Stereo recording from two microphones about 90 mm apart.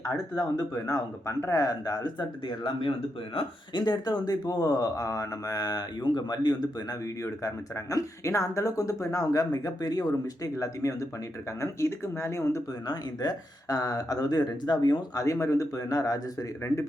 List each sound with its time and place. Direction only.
0.0 s speech: 40° left (ahead or behind)
3.8 s speech: 50° left (ahead or behind)
7.4 s speech: 40° left (ahead or behind)
12.9 s speech: 45° left (ahead or behind)
15.1 s speech: 35° left (ahead or behind)